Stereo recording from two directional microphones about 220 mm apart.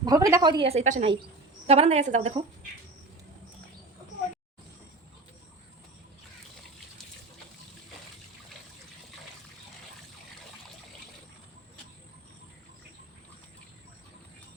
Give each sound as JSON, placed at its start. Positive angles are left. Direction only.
{"t": 0.0, "sound": "speech", "side_deg": -15}